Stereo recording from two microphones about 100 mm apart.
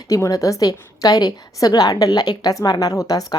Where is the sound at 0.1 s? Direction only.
35° left (ahead or behind).